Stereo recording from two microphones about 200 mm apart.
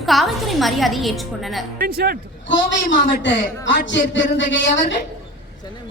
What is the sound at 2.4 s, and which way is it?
Speech, 65° left (ahead or behind).